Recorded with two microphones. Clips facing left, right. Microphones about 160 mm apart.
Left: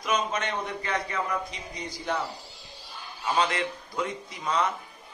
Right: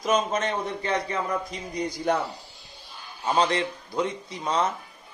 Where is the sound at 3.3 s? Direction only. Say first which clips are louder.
Right 3 dB; 35° right (ahead or behind).